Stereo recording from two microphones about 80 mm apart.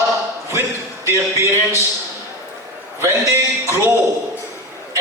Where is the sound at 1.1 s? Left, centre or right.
Right.